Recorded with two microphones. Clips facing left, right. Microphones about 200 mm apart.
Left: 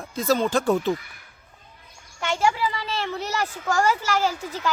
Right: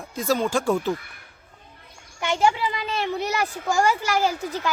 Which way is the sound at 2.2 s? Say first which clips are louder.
Right 1 dB; 15° right (ahead or behind).